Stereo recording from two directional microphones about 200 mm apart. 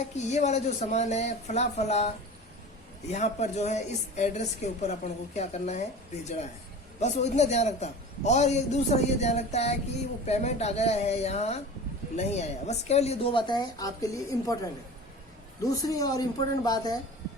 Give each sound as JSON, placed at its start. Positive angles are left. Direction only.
{"t": 0.0, "sound": "a man's voice", "side_deg": 35}
{"t": 7.0, "sound": "a man's voice", "side_deg": 35}